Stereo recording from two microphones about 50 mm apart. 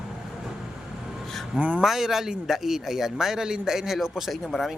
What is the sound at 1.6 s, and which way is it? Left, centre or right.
Speech, right.